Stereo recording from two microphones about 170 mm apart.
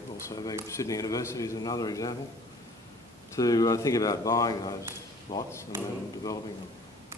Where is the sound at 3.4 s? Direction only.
20° left (ahead or behind).